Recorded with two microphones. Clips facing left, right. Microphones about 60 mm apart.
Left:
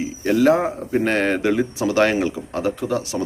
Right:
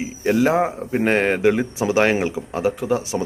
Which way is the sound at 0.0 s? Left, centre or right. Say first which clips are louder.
Left 1 dB; centre.